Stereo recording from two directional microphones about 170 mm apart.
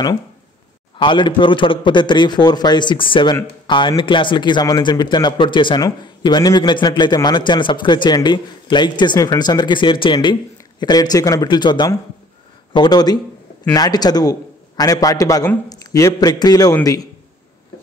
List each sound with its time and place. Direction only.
0.9 s a man's voice: 30° left (ahead or behind)